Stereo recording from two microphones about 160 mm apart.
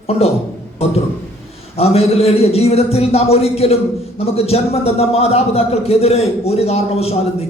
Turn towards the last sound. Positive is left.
turn(degrees=40)  # may be behind; listen again after turning